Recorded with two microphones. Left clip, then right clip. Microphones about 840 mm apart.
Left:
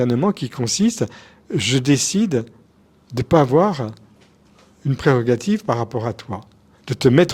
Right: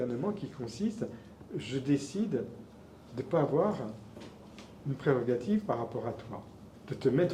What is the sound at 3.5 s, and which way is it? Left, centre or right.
Speech, left.